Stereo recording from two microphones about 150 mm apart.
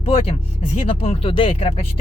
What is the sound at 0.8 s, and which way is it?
Speech, 40° left (ahead or behind).